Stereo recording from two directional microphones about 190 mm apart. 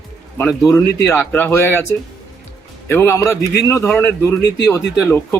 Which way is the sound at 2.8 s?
10° left (ahead or behind).